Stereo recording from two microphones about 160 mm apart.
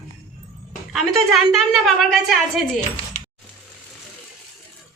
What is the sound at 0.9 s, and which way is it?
A woman's voice, centre (ahead or behind).